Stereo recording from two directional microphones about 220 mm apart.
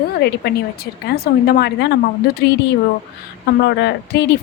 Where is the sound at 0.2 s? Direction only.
50° left (ahead or behind).